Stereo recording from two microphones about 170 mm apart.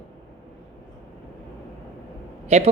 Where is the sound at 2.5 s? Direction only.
40° right (ahead or behind).